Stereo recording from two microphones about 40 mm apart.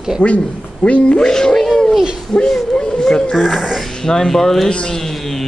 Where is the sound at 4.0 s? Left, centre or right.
Centre.